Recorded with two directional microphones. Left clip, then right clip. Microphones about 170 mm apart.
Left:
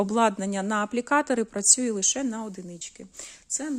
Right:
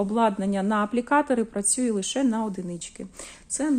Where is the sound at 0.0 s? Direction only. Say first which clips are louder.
Even; 45° left (ahead or behind).